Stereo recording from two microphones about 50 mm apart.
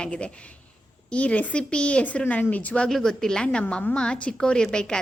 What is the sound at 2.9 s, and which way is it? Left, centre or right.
A woman's voice, centre.